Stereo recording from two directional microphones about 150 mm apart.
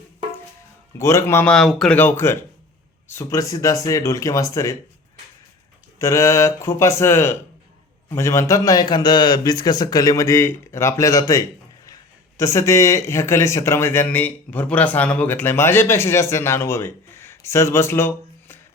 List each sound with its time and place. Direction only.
0.9 s speech: 20° left (ahead or behind)
1.5 s speech: 5° left (ahead or behind)
2.0 s a man's voice: 15° left (ahead or behind)
6.0 s a man's voice: 20° left (ahead or behind)